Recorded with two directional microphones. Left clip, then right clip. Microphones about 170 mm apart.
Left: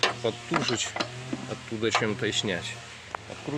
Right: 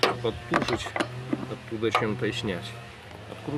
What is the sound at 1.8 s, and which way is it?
Speech, 40° left (ahead or behind).